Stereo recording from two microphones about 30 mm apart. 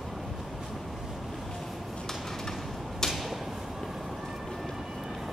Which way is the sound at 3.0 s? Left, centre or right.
Left.